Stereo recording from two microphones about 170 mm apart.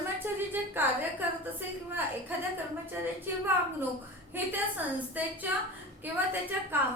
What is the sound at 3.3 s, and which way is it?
A woman's voice, 10° right (ahead or behind).